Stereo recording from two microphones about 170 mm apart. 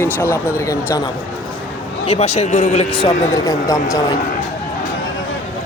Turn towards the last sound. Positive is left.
turn(degrees=20)  # may be behind; listen again after turning